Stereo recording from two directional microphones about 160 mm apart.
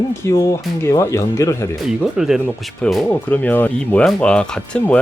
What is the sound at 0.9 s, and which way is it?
Speech, 15° left (ahead or behind).